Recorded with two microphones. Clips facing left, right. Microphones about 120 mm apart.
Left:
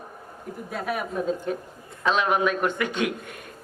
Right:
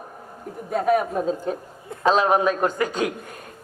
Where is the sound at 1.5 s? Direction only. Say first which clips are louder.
Right 2 dB; 30° right (ahead or behind).